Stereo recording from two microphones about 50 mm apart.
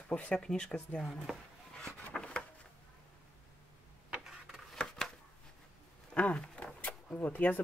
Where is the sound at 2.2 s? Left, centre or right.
Left.